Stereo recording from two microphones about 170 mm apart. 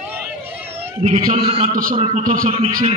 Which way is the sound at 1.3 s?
40° right (ahead or behind).